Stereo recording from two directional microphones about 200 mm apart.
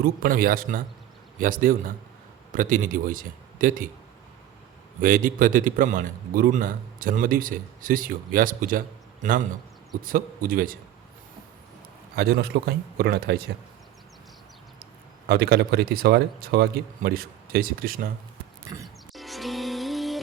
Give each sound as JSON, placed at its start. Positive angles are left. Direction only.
{"t": 0.0, "sound": "a man's voice", "side_deg": -45}
{"t": 4.9, "sound": "a man's voice", "side_deg": -45}
{"t": 12.1, "sound": "a man's voice", "side_deg": -50}
{"t": 15.3, "sound": "a man's voice", "side_deg": -50}
{"t": 18.7, "sound": "music", "side_deg": -20}
{"t": 19.1, "sound": "music", "side_deg": 0}